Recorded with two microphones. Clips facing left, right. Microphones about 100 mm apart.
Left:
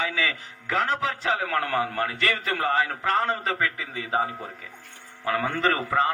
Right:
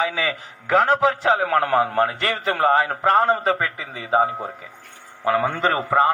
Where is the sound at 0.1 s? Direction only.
30° right (ahead or behind).